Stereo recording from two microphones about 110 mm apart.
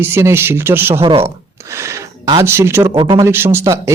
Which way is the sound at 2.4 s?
25° right (ahead or behind).